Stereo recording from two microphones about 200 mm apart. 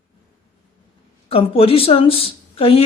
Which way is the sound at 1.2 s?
30° left (ahead or behind).